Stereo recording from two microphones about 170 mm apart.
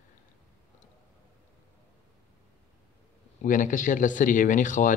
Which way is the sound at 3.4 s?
50° left (ahead or behind).